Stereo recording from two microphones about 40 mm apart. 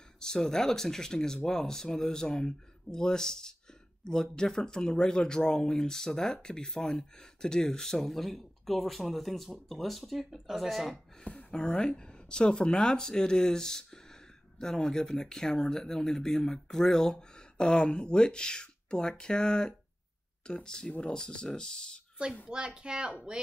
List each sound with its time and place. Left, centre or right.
0.2 s speech: centre
11.2 s speech: left
11.7 s speech: left
12.0 s speech: left
22.8 s speech: right